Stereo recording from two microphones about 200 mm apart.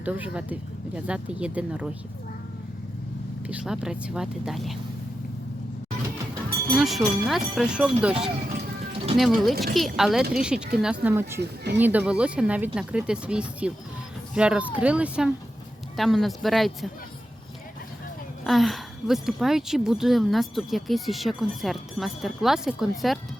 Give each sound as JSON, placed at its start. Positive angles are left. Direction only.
{"t": 0.0, "sound": "speech", "side_deg": -5}
{"t": 3.4, "sound": "speech", "side_deg": -5}
{"t": 6.7, "sound": "speech", "side_deg": 0}
{"t": 9.4, "sound": "speech", "side_deg": 0}
{"t": 11.3, "sound": "speech", "side_deg": -55}
{"t": 11.8, "sound": "speech", "side_deg": -10}
{"t": 18.4, "sound": "speech", "side_deg": 0}